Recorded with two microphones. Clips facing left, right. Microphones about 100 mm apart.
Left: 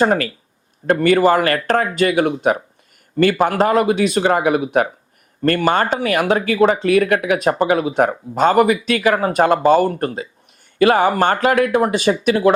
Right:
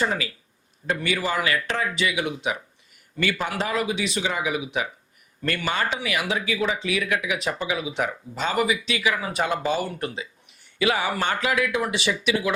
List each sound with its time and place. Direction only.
0.0 s speech: 50° left (ahead or behind)